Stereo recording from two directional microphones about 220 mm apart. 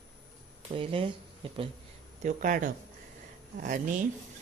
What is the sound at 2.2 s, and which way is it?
Speech, 35° right (ahead or behind).